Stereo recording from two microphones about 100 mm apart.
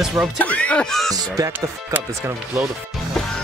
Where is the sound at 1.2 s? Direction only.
35° right (ahead or behind).